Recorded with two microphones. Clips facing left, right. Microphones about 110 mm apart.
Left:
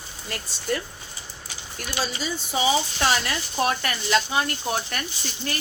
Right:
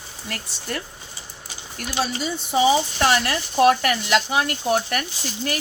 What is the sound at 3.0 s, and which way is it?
Speech, 60° right (ahead or behind).